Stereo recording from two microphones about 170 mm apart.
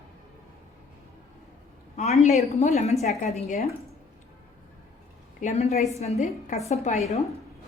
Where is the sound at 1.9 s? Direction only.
40° left (ahead or behind).